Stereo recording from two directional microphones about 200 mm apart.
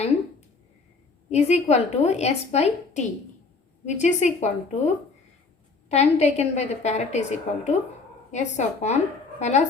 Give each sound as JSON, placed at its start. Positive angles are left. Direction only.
{"t": 1.3, "sound": "a woman's voice", "side_deg": 35}